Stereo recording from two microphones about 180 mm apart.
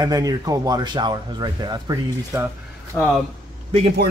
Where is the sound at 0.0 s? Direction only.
20° right (ahead or behind).